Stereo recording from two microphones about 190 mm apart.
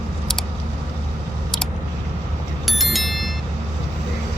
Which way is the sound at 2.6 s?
Centre (ahead or behind).